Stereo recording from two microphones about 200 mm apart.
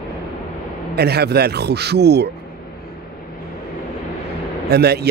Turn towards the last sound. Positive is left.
turn(degrees=-55)  # may be behind; listen again after turning